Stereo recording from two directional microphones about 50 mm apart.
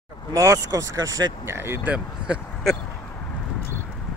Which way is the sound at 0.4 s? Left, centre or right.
Right.